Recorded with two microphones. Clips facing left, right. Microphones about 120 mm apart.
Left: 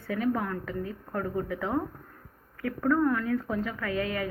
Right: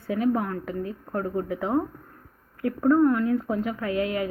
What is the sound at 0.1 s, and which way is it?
A woman's voice, 15° right (ahead or behind).